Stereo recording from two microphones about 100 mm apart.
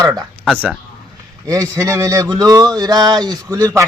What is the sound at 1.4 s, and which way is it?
A man's voice, 35° right (ahead or behind).